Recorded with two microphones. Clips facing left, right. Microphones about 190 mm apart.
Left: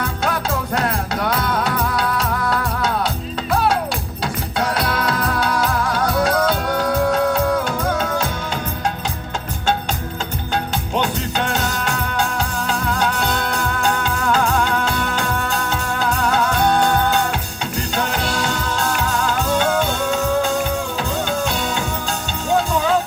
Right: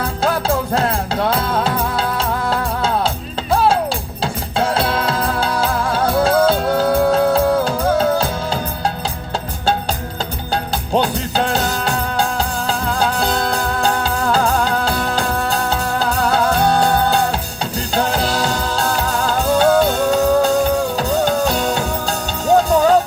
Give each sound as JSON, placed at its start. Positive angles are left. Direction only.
{"t": 0.0, "sound": "music", "side_deg": -30}
{"t": 10.5, "sound": "music", "side_deg": -35}